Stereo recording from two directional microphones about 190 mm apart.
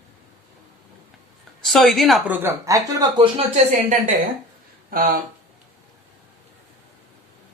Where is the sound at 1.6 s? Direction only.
Centre (ahead or behind).